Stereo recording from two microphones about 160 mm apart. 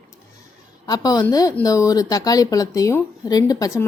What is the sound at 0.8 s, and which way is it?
A woman's voice, 25° left (ahead or behind).